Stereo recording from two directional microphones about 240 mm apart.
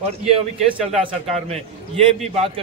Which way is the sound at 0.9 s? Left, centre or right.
Right.